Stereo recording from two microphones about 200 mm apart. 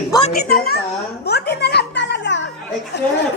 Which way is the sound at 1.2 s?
55° left (ahead or behind).